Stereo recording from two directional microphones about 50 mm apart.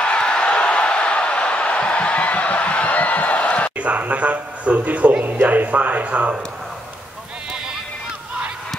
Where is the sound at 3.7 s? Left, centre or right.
Right.